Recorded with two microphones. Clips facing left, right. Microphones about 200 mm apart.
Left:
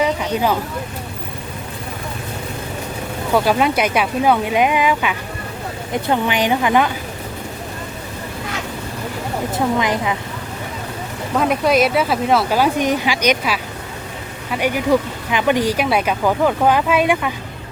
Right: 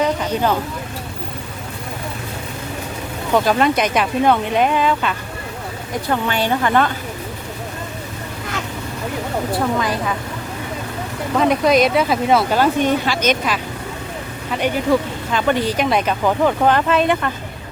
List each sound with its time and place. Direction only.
0.0 s speech: 5° left (ahead or behind)
3.3 s speech: 5° left (ahead or behind)
9.7 s speech: 15° left (ahead or behind)
11.3 s speech: 5° left (ahead or behind)